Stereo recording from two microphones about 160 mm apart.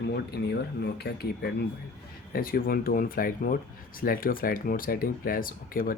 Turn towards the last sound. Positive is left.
turn(degrees=65)  # may be behind; listen again after turning